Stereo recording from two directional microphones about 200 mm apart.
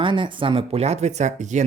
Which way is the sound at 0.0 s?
25° right (ahead or behind).